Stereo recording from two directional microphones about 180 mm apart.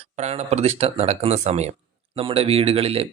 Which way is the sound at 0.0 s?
35° right (ahead or behind).